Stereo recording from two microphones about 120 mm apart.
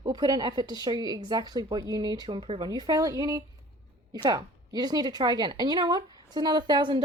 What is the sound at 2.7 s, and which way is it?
Speech, 35° right (ahead or behind).